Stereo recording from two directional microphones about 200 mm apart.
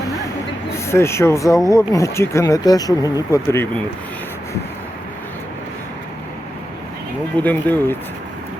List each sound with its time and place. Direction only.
0.7 s speech: 15° left (ahead or behind)
7.4 s speech: 10° left (ahead or behind)